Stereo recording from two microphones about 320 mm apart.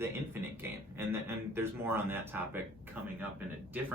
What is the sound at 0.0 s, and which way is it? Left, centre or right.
A man's voice, centre.